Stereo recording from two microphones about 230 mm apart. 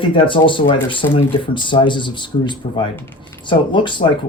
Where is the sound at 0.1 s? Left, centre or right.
Left.